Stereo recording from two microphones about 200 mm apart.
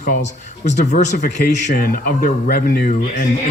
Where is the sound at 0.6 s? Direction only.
40° left (ahead or behind).